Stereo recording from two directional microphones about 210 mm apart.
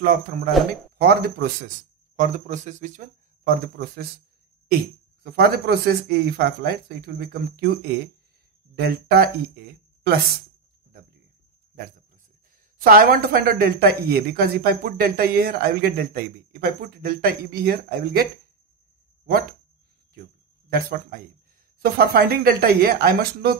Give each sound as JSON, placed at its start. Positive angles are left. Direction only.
{"t": 0.0, "sound": "speech", "side_deg": -40}
{"t": 2.1, "sound": "speech", "side_deg": -35}
{"t": 5.2, "sound": "speech", "side_deg": -50}
{"t": 12.7, "sound": "speech", "side_deg": -45}
{"t": 20.7, "sound": "speech", "side_deg": -45}